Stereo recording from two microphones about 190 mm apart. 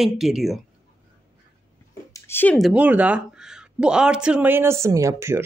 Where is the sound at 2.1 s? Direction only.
10° left (ahead or behind).